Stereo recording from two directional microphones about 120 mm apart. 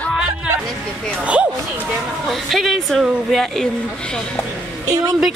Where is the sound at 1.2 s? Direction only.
10° right (ahead or behind).